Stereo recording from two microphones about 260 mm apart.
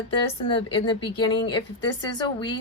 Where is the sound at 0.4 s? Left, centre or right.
Left.